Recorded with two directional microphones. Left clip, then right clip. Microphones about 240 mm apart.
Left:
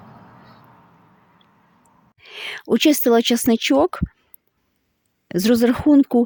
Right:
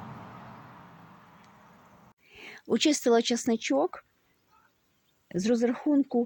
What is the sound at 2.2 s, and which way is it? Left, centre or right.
Speech, left.